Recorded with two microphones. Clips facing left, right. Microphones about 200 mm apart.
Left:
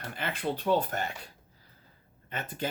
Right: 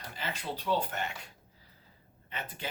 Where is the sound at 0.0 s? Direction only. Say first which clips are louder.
Left 6 dB; 55° left (ahead or behind); by 1.3 s 40° left (ahead or behind).